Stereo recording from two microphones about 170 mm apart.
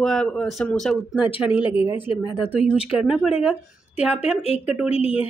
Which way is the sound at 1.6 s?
30° left (ahead or behind).